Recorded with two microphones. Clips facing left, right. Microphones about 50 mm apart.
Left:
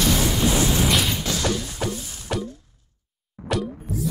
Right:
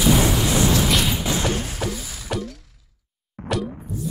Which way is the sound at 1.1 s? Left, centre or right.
Centre.